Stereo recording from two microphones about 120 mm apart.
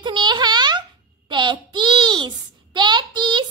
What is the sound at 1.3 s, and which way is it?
A child's voice, 40° right (ahead or behind).